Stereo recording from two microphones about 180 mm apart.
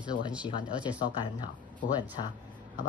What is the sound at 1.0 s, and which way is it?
Speech, 25° left (ahead or behind).